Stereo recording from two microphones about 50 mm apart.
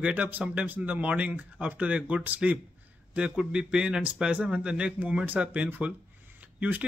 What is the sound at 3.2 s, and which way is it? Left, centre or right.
Speech, centre.